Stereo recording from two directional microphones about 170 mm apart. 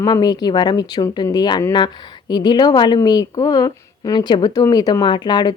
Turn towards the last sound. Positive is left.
turn(degrees=25)  # may be behind; listen again after turning